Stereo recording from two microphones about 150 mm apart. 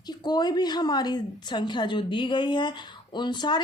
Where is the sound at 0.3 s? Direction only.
30° left (ahead or behind).